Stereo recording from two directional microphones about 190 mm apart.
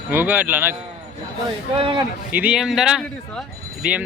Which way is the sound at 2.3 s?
5° right (ahead or behind).